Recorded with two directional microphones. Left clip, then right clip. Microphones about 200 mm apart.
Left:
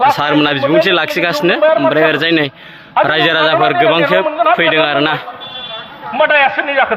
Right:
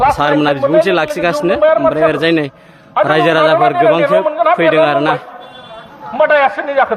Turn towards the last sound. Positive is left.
turn(degrees=-10)  # may be behind; listen again after turning